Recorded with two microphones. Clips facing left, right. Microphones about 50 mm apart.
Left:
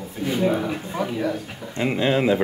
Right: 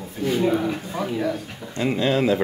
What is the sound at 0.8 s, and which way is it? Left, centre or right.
A man's voice, centre.